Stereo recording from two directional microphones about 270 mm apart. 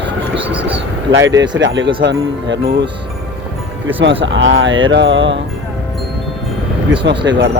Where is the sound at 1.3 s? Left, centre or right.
Centre.